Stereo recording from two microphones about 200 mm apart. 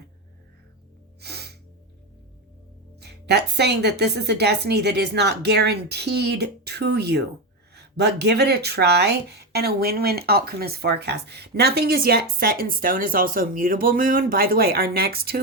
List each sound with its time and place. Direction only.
1.2 s gasp: 55° right (ahead or behind)
3.0 s a woman's voice: 55° right (ahead or behind)